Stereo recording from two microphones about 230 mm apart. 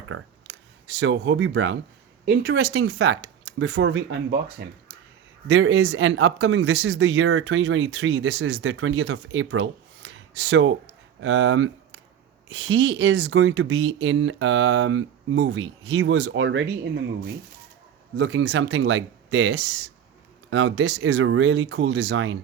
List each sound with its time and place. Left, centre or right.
0.9 s speech: right
5.5 s speech: right